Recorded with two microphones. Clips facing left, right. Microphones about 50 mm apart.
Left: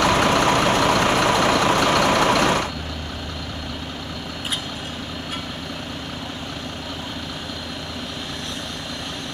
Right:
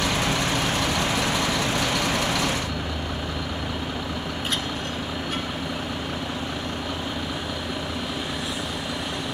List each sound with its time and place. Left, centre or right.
0.0 s vehicle: left